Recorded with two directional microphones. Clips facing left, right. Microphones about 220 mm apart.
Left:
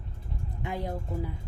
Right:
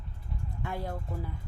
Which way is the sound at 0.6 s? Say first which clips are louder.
Left 3 dB; 15° left (ahead or behind).